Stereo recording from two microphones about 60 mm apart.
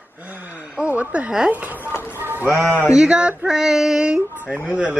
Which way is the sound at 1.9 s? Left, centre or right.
Left.